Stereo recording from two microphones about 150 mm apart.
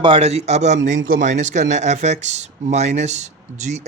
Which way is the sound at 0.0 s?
40° right (ahead or behind).